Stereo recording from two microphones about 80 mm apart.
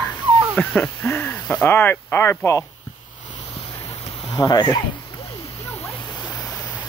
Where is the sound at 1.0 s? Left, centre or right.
Left.